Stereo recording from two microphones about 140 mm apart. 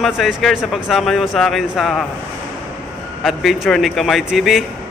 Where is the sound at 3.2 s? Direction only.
Centre (ahead or behind).